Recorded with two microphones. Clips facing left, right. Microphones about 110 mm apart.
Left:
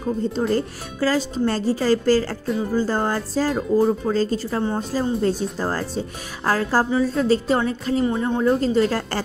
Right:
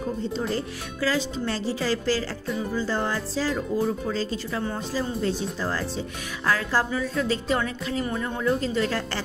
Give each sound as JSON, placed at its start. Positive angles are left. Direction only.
{"t": 0.4, "sound": "speech", "side_deg": 45}
{"t": 8.0, "sound": "speech", "side_deg": 25}